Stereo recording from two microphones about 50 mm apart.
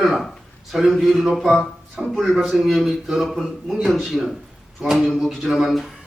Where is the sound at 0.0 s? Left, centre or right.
Centre.